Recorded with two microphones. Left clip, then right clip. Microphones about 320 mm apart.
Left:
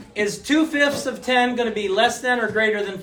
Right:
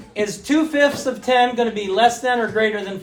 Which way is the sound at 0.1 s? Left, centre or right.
Centre.